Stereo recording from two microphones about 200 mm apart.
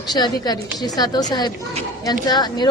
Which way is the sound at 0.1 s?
20° left (ahead or behind).